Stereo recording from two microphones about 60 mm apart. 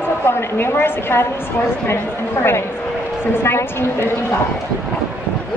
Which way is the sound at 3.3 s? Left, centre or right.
Left.